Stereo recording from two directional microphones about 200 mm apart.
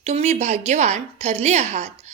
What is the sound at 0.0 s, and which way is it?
A woman's voice, 35° right (ahead or behind).